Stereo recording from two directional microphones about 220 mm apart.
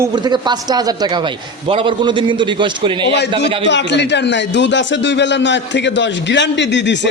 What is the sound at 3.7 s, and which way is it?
A man's voice, 55° left (ahead or behind).